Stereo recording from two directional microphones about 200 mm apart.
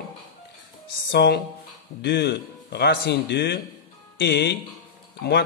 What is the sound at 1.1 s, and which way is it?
A man's voice, 55° left (ahead or behind).